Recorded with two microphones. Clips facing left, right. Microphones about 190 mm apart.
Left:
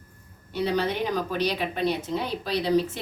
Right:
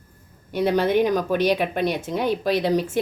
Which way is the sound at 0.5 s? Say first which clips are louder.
Right 6 dB; 50° right (ahead or behind).